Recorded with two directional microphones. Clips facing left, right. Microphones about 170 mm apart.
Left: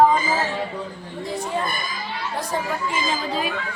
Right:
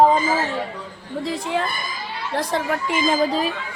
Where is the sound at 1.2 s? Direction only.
90° right.